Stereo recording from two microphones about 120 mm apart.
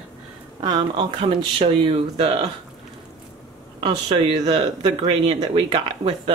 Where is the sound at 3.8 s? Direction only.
40° right (ahead or behind).